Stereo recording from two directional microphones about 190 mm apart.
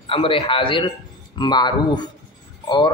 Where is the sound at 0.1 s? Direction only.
30° left (ahead or behind).